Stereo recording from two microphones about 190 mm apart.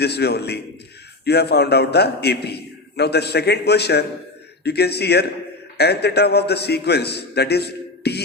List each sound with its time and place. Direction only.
0.0 s a man's voice: 60° left (ahead or behind)